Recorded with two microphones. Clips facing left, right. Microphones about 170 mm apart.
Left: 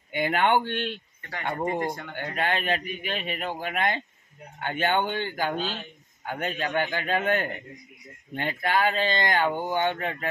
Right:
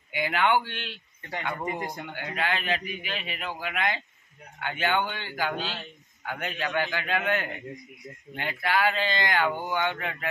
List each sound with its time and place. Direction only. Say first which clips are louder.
0.1 s a man's voice: left 2 dB; 50° left (ahead or behind)